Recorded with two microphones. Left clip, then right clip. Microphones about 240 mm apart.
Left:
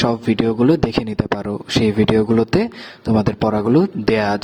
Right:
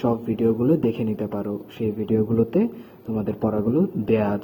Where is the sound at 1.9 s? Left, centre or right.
Left.